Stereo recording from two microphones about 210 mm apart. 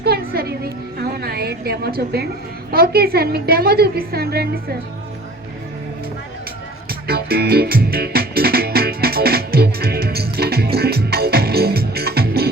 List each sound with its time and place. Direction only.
0.0 s music: 50° right (ahead or behind)
2.7 s a woman's voice: 50° right (ahead or behind)
6.8 s music: 45° right (ahead or behind)